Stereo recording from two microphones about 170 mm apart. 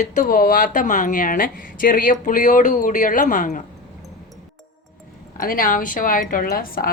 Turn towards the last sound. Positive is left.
turn(degrees=60)  # may be behind; listen again after turning